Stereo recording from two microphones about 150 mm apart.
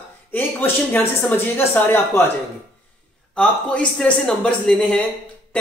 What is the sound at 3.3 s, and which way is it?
Speech, 5° left (ahead or behind).